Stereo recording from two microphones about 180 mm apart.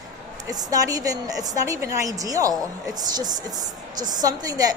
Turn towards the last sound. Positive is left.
turn(degrees=-20)  # may be behind; listen again after turning